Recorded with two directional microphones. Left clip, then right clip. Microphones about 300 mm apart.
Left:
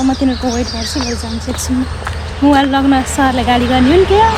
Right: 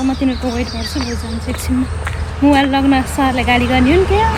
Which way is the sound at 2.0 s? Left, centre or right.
Centre.